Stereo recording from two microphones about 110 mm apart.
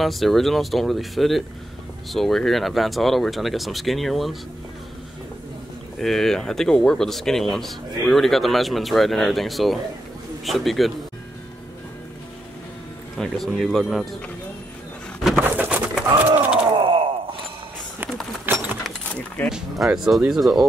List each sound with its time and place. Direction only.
0.0 s speech: centre (ahead or behind)
5.9 s speech: 5° left (ahead or behind)
13.2 s speech: centre (ahead or behind)
15.3 s bird: 15° right (ahead or behind)
16.7 s a sound: 50° right (ahead or behind)
18.4 s a sound: 15° right (ahead or behind)
19.1 s keys jangling: 10° left (ahead or behind)
19.5 s speech: 5° right (ahead or behind)